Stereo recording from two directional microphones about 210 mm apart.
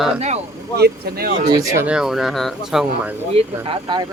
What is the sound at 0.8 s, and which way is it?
Speech, 50° right (ahead or behind).